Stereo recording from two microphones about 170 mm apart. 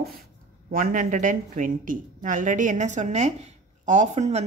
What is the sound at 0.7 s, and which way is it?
Speech, 55° right (ahead or behind).